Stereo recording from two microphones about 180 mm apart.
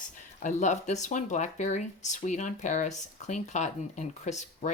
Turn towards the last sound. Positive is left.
turn(degrees=40)  # may be behind; listen again after turning